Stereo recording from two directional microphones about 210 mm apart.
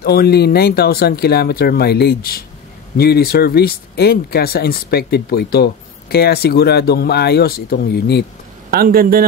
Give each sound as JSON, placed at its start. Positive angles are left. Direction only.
{"t": 0.0, "sound": "speech", "side_deg": 50}
{"t": 8.6, "sound": "a man's voice", "side_deg": -45}